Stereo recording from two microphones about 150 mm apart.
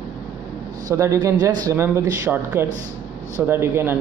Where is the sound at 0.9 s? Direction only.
20° right (ahead or behind).